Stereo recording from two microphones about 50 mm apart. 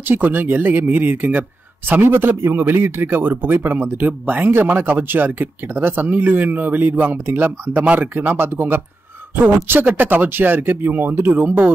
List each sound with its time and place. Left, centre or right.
0.1 s a man's voice: right
7.7 s a man's voice: right